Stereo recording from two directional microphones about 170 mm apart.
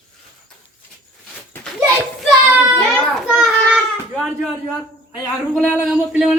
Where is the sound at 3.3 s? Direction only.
5° right (ahead or behind).